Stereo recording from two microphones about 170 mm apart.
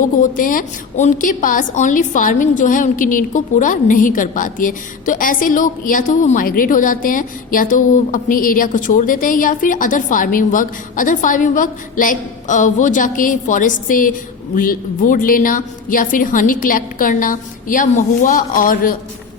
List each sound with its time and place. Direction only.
0.0 s a woman's voice: 50° left (ahead or behind)